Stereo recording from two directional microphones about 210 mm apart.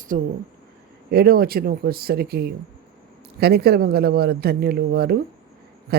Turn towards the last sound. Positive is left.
turn(degrees=-50)  # may be behind; listen again after turning